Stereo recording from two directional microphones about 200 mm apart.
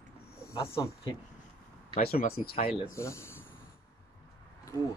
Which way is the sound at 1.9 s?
45° left (ahead or behind).